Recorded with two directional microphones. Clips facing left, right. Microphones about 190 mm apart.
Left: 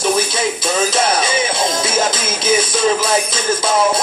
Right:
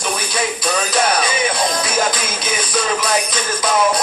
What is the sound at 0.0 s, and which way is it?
Music, 25° left (ahead or behind).